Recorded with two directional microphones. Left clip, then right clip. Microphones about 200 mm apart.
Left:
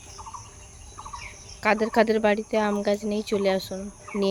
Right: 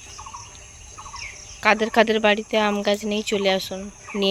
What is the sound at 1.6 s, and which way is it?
Speech, 5° left (ahead or behind).